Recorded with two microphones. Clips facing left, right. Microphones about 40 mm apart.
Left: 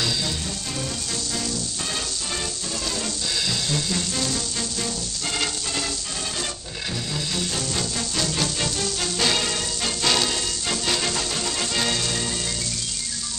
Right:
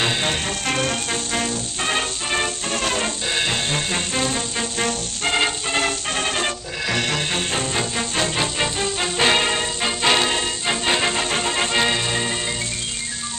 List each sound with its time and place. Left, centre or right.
0.0 s music: right
6.9 s music: right
7.3 s music: right